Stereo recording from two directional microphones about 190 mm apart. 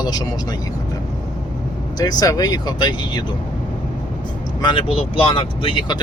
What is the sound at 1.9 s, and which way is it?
Speech, 20° left (ahead or behind).